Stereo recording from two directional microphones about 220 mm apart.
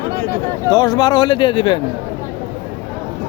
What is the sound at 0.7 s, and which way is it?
Speech, 20° left (ahead or behind).